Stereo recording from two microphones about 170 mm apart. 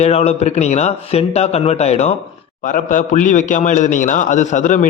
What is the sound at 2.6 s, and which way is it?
A man's voice, 50° left (ahead or behind).